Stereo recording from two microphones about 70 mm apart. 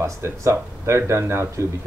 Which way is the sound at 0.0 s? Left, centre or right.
Right.